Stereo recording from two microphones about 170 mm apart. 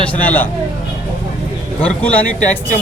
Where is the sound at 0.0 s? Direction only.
10° left (ahead or behind).